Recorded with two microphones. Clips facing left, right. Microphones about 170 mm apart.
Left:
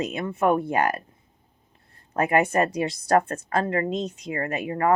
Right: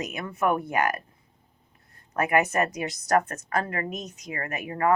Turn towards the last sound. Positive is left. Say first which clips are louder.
# left 2 dB
turn(degrees=30)  # may be behind; listen again after turning